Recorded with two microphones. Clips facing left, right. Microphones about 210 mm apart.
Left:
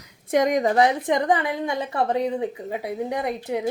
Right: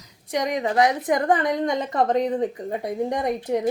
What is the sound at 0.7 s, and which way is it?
Speech, 25° left (ahead or behind).